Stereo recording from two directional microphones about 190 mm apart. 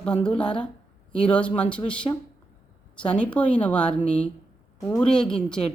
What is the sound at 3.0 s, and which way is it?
Speech, 5° left (ahead or behind).